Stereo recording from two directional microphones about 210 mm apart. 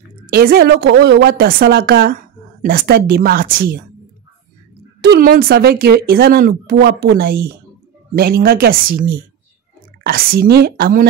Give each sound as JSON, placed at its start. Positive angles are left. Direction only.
{"t": 0.3, "sound": "speech", "side_deg": -45}
{"t": 5.0, "sound": "speech", "side_deg": -45}